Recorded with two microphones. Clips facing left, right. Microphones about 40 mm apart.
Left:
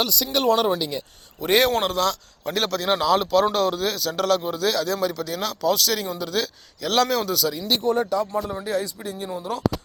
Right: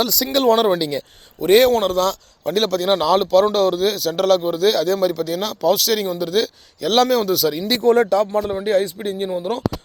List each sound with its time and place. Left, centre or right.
0.3 s speech: right
1.4 s a man's voice: centre
2.0 s a man's voice: centre
7.9 s speech: right
8.3 s speech: right